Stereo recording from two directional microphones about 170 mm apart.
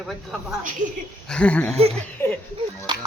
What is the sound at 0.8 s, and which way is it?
Speech, 45° right (ahead or behind).